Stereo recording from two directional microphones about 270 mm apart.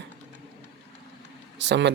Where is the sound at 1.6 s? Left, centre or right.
Right.